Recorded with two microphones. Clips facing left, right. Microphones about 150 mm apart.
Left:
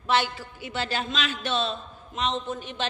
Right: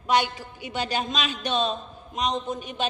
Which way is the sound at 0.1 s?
15° right (ahead or behind).